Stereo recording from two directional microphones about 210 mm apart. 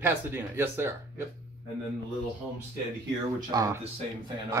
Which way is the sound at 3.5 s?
15° right (ahead or behind).